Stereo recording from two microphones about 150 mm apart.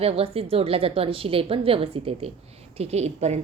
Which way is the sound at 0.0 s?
40° right (ahead or behind).